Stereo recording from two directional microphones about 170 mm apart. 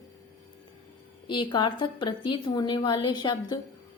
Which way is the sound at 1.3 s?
30° left (ahead or behind).